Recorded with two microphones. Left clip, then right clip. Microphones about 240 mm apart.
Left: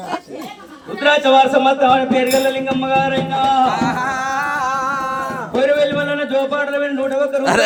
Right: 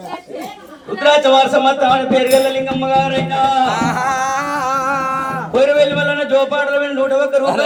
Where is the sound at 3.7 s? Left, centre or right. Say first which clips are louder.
Right 2 dB; right.